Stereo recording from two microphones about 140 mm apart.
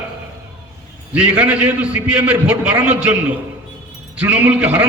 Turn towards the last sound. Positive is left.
turn(degrees=-15)  # may be behind; listen again after turning